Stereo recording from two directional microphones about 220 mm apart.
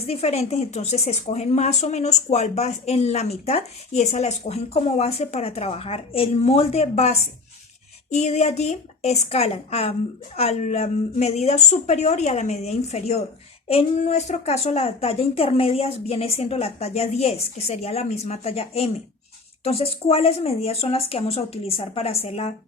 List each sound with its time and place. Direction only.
0.0 s speech: 30° left (ahead or behind)